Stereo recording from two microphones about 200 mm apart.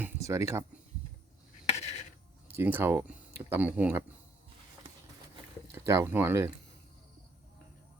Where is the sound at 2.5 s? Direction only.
10° right (ahead or behind).